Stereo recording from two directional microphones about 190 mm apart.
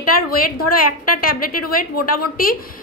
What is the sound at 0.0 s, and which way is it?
A woman's voice, 50° left (ahead or behind).